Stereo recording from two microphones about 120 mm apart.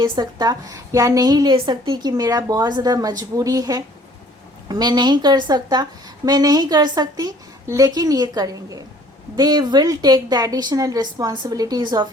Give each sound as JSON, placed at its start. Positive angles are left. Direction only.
{"t": 0.0, "sound": "a woman's voice", "side_deg": -35}